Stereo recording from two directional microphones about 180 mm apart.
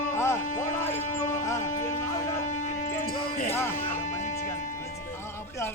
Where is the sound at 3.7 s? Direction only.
45° left (ahead or behind).